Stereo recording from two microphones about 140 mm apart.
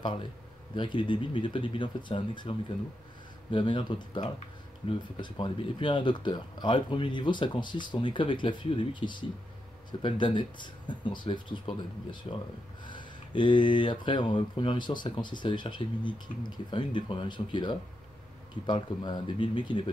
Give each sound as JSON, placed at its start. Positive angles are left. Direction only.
{"t": 0.0, "sound": "speech", "side_deg": 35}
{"t": 3.5, "sound": "speech", "side_deg": 35}